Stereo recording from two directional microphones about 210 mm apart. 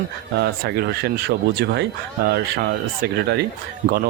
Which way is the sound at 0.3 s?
50° right (ahead or behind).